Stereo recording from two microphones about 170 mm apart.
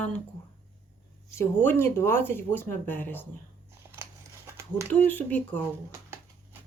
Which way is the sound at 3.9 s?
20° right (ahead or behind).